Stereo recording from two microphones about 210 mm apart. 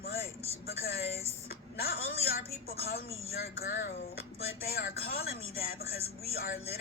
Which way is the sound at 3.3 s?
45° left (ahead or behind).